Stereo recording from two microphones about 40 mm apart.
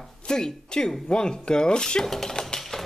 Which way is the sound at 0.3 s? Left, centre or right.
Centre.